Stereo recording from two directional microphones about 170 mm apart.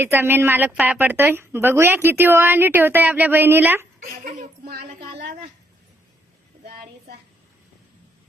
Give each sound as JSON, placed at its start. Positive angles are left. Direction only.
{"t": 0.0, "sound": "a woman's voice", "side_deg": -10}
{"t": 4.2, "sound": "a woman's voice", "side_deg": -55}